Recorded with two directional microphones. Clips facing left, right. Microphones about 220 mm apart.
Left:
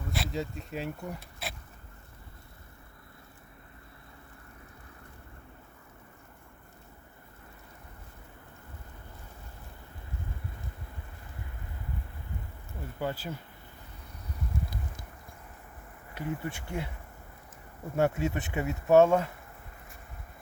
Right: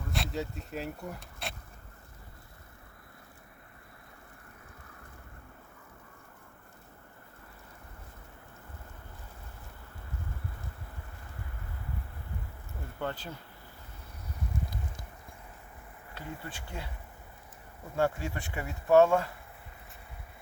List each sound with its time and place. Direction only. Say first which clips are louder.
0.1 s speech: left 1 dB; centre (ahead or behind)
13.0 s speech: left 2 dB; 10° left (ahead or behind)
16.1 s speech: left 7 dB; 20° left (ahead or behind)
17.9 s speech: left 3 dB; 20° left (ahead or behind)